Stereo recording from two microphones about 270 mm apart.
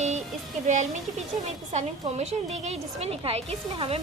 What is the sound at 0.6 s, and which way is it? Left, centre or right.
A woman's voice, right.